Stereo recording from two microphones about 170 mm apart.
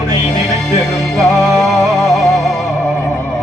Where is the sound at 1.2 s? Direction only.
Centre (ahead or behind).